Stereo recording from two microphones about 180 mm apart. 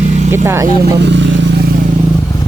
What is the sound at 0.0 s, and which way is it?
Vehicle, 40° right (ahead or behind).